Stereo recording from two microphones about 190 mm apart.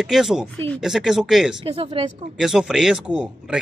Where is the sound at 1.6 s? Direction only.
30° right (ahead or behind).